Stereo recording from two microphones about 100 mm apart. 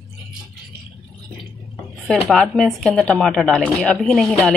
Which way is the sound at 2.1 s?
5° left (ahead or behind).